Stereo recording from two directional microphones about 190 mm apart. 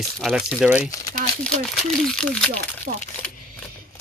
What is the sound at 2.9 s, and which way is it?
Speech, 45° right (ahead or behind).